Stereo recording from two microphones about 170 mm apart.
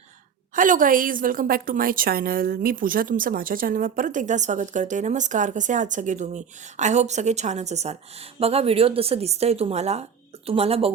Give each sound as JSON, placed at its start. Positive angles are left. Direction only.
{"t": 0.5, "sound": "a woman's voice", "side_deg": -50}